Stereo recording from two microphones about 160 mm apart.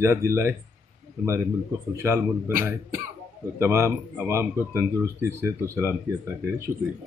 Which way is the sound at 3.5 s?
15° right (ahead or behind).